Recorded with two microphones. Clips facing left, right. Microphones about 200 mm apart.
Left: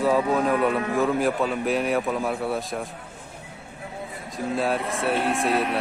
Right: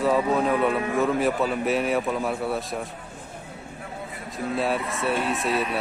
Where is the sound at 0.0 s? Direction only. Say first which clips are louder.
Even; centre (ahead or behind).